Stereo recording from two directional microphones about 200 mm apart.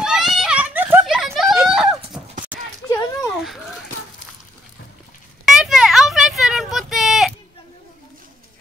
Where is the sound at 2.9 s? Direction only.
15° left (ahead or behind).